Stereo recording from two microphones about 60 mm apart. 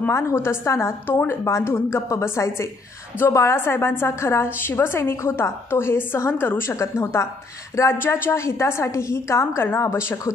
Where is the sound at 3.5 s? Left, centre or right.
Left.